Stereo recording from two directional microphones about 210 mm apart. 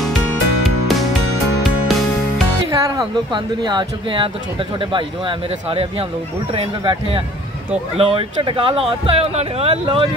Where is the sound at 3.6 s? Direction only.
20° right (ahead or behind).